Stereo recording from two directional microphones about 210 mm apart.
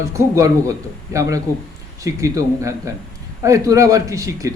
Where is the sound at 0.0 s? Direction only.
15° right (ahead or behind).